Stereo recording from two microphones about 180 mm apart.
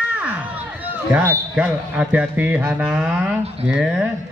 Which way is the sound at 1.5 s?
10° right (ahead or behind).